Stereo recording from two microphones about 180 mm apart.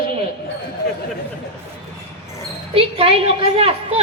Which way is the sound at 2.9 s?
30° right (ahead or behind).